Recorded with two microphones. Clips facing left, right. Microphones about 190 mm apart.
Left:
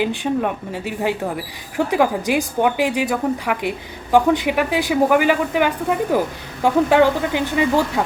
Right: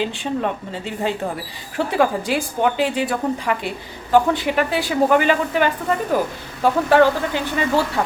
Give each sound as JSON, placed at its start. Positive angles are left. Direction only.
{"t": 0.0, "sound": "a woman's voice", "side_deg": 15}